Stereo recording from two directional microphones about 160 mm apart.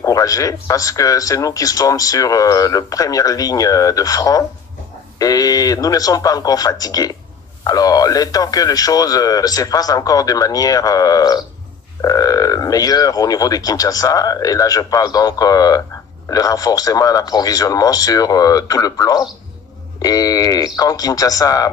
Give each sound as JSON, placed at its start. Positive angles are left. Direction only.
{"t": 0.0, "sound": "speech", "side_deg": 20}